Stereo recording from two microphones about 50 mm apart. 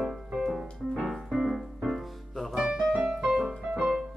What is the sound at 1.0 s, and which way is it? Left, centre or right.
Music, centre.